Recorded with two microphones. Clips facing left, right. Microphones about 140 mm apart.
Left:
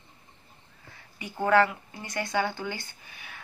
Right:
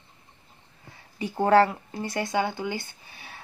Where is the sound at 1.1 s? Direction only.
35° right (ahead or behind).